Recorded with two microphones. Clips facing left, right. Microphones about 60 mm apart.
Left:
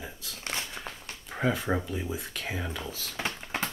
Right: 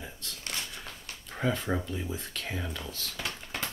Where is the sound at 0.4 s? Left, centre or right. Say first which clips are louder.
Left 4 dB; left.